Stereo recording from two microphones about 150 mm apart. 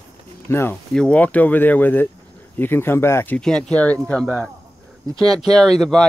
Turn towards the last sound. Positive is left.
turn(degrees=0)  # may be behind; listen again after turning